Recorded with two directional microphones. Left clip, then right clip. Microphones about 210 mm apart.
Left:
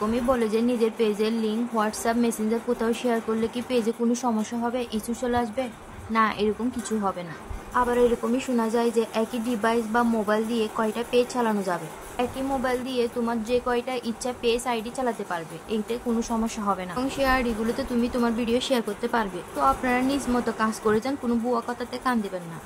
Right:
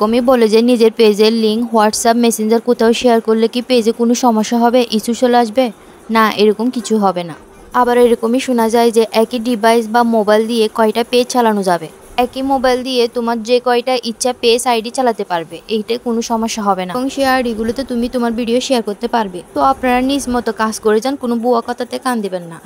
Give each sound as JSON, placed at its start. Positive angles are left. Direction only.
{"t": 0.0, "sound": "a woman's voice", "side_deg": -45}